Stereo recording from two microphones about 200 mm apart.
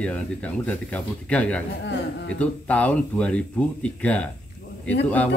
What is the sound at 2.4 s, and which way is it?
Speech, 5° left (ahead or behind).